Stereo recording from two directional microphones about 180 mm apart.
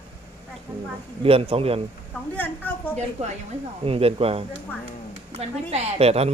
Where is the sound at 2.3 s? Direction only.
10° left (ahead or behind).